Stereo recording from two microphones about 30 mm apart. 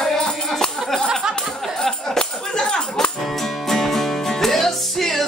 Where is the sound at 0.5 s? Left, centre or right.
Left.